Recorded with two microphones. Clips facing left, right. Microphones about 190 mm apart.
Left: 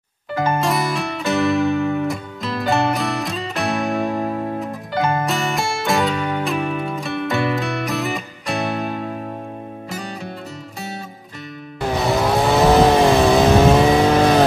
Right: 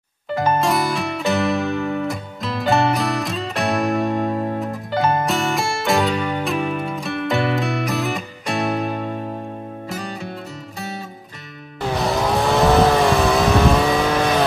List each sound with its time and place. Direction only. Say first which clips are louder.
0.6 s music: right 1 dB; centre (ahead or behind)
12.0 s vehicle: left 2 dB; centre (ahead or behind)
12.8 s vehicle: left 3 dB; 25° left (ahead or behind)